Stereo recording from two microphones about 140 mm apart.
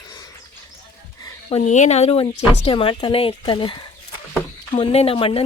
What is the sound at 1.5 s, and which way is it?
Speech, 60° left (ahead or behind).